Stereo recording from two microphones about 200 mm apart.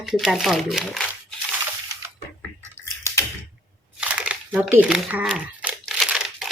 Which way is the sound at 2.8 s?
15° left (ahead or behind).